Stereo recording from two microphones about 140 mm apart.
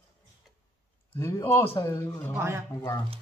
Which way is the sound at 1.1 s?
15° left (ahead or behind).